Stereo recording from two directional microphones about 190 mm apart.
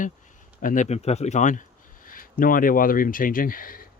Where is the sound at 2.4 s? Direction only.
45° left (ahead or behind).